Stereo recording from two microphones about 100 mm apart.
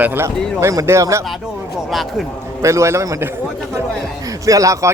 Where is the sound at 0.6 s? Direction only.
30° right (ahead or behind).